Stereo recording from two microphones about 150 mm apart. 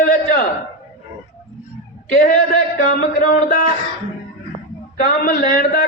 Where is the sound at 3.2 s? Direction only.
65° left (ahead or behind).